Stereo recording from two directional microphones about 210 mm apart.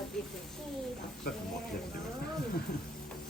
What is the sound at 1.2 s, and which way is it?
Speech, 45° left (ahead or behind).